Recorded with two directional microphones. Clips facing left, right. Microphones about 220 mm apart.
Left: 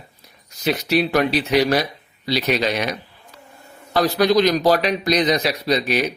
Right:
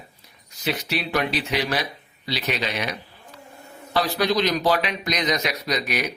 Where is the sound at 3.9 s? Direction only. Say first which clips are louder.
Left 6 dB; 40° left (ahead or behind).